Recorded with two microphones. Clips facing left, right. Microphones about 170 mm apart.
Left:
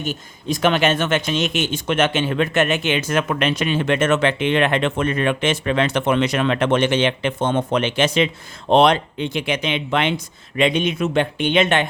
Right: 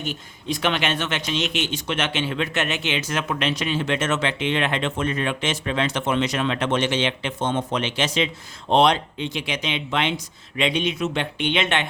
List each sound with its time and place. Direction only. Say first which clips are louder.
0.0 s speech: left 4 dB; 45° left (ahead or behind)